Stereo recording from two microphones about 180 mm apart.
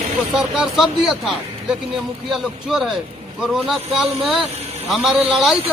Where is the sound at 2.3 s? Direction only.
Centre (ahead or behind).